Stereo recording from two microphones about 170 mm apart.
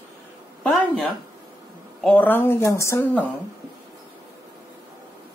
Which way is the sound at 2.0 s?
10° left (ahead or behind).